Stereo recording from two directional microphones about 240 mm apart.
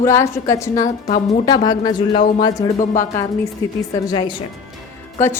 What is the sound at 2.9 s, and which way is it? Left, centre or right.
A woman's voice, centre.